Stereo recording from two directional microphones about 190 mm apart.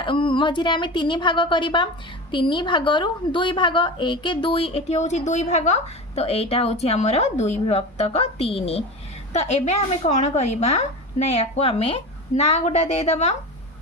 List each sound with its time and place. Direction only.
0.0 s a woman's voice: 25° left (ahead or behind)